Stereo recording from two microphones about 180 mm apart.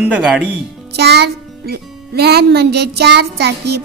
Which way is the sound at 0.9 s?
65° right (ahead or behind).